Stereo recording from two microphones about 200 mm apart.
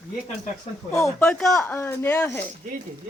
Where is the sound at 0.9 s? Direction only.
15° left (ahead or behind).